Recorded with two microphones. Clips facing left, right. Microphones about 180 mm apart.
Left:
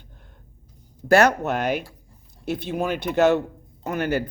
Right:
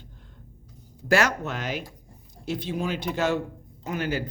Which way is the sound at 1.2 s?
60° left (ahead or behind).